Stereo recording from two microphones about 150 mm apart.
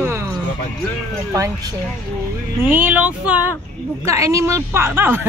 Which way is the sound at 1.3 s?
20° right (ahead or behind).